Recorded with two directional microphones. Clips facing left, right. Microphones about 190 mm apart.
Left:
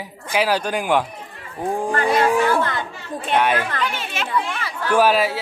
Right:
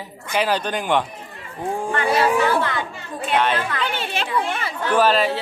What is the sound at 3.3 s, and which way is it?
Speech, 10° left (ahead or behind).